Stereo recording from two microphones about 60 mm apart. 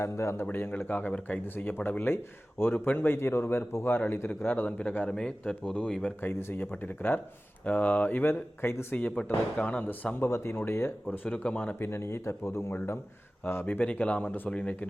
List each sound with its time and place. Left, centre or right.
0.0 s speech: left
0.5 s a man's voice: left
0.8 s a man's voice: left
5.0 s speech: centre
6.2 s a man's voice: left
8.9 s speech: left
9.8 s a man's voice: left
10.2 s speech: left
11.1 s speech: left
11.9 s a man's voice: left
14.5 s speech: left